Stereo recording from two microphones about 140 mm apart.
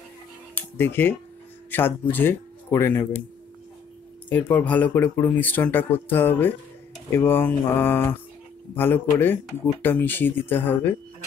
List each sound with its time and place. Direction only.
0.6 s speech: 15° left (ahead or behind)
4.3 s speech: 10° left (ahead or behind)